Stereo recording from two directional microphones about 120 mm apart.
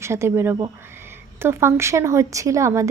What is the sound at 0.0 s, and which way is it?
A woman's voice, 20° right (ahead or behind).